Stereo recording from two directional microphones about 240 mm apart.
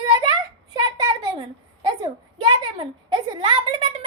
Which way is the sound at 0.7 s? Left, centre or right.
Centre.